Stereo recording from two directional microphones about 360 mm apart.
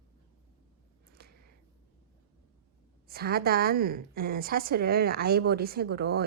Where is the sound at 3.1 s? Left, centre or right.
Right.